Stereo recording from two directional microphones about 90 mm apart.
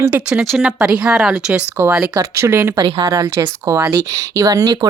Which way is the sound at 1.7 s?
25° right (ahead or behind).